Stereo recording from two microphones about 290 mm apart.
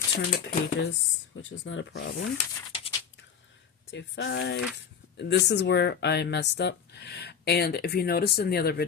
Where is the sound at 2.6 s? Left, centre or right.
Centre.